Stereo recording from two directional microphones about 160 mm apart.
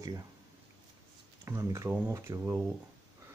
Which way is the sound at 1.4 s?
20° right (ahead or behind).